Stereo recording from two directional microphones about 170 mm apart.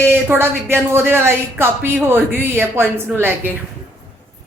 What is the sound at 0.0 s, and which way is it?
Speech, 15° right (ahead or behind).